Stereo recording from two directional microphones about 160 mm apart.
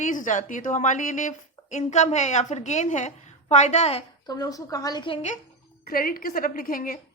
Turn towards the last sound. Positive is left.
turn(degrees=60)  # may be behind; listen again after turning